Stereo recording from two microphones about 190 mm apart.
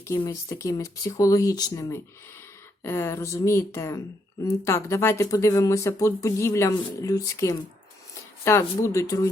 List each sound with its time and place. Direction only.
0.1 s speech: 15° left (ahead or behind)